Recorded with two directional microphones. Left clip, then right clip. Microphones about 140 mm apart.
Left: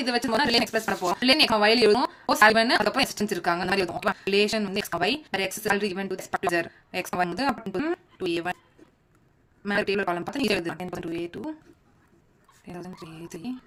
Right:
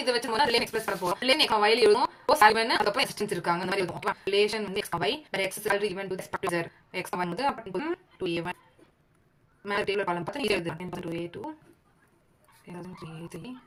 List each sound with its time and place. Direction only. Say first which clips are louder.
0.0 s speech: left 1 dB; 35° left (ahead or behind)
9.6 s speech: left 3 dB; 35° left (ahead or behind)
12.7 s speech: left 3 dB; 45° left (ahead or behind)